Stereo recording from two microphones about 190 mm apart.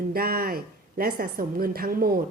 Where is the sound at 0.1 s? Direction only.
50° right (ahead or behind).